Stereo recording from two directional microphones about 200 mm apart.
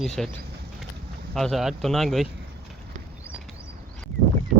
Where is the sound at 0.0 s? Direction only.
Centre (ahead or behind).